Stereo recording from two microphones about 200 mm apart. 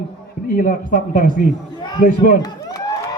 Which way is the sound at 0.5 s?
40° left (ahead or behind).